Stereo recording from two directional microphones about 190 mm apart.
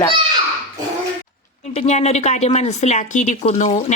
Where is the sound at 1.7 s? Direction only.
35° left (ahead or behind).